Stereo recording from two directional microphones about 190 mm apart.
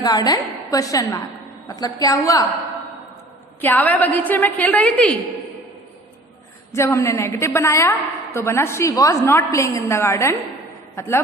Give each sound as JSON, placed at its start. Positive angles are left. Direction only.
{"t": 0.0, "sound": "a woman's voice", "side_deg": 20}
{"t": 3.6, "sound": "a woman's voice", "side_deg": 10}
{"t": 6.7, "sound": "a woman's voice", "side_deg": 15}